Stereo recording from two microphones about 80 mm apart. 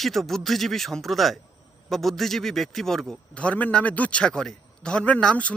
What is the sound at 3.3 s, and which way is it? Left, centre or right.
A man's voice, centre.